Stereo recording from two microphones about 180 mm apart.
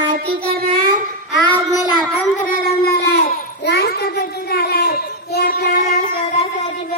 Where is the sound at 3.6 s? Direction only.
60° left (ahead or behind).